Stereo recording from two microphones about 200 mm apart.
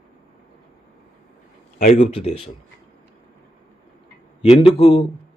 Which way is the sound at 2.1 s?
30° left (ahead or behind).